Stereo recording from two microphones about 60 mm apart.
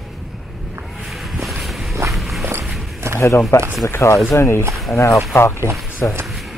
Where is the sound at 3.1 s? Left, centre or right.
Left.